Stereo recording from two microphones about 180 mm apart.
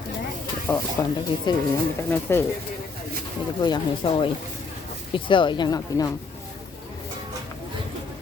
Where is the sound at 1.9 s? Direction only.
10° left (ahead or behind).